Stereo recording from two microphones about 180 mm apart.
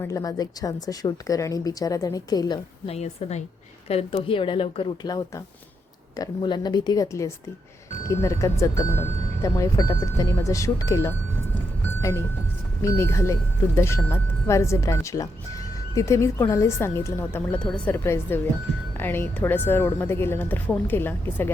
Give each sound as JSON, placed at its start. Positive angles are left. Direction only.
{"t": 0.0, "sound": "speech", "side_deg": 20}
{"t": 12.8, "sound": "speech", "side_deg": 15}